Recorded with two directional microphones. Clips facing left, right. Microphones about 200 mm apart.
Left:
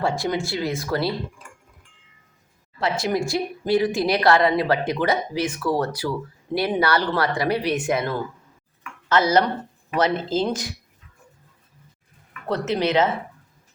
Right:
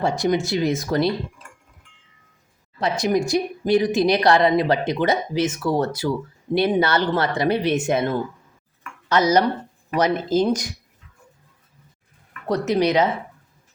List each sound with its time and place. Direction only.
0.0 s speech: 20° right (ahead or behind)
2.8 s speech: 15° right (ahead or behind)
12.5 s speech: 15° right (ahead or behind)